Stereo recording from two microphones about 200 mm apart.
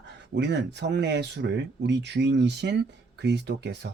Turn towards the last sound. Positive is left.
turn(degrees=-60)  # may be behind; listen again after turning